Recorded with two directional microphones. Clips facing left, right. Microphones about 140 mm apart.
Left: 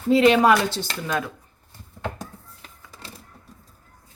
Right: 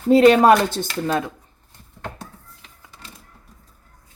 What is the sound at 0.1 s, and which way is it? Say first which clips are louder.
Speech: right 4 dB; 45° right (ahead or behind).